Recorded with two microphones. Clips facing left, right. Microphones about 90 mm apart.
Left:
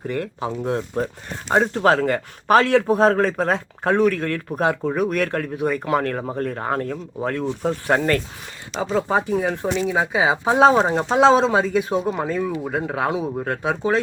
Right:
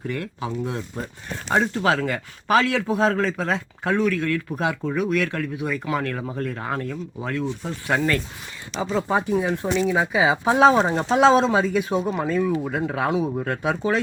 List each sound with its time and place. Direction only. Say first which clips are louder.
0.1 s speech: left 4 dB; 40° left (ahead or behind)